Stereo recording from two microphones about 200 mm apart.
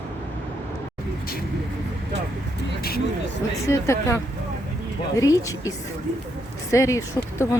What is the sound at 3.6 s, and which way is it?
Speech, 15° left (ahead or behind).